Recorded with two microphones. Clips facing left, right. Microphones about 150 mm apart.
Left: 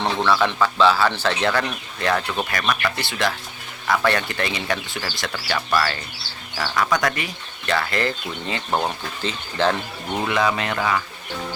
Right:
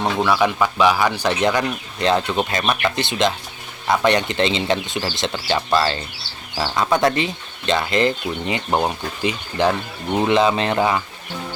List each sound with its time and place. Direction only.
0.0 s speech: 10° right (ahead or behind); by 11.0 s 25° right (ahead or behind)